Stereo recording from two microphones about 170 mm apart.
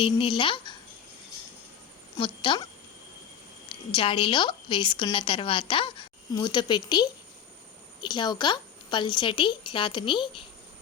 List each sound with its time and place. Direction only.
0.0 s a woman's voice: 30° left (ahead or behind)
2.1 s a woman's voice: 30° left (ahead or behind)
3.7 s a woman's voice: 30° left (ahead or behind)